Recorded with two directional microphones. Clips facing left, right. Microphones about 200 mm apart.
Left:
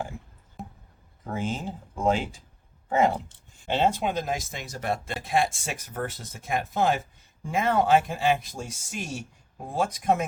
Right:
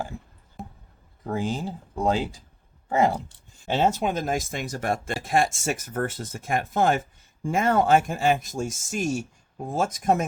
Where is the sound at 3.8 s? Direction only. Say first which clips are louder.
Right 2 dB; 45° right (ahead or behind).